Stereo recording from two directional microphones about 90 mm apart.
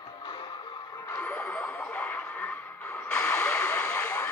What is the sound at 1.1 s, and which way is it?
Radio, 20° left (ahead or behind).